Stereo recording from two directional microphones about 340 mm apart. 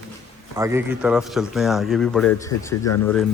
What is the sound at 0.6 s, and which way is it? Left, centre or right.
Speech, centre.